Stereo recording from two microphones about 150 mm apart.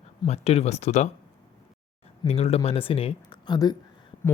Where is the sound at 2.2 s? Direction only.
40° left (ahead or behind).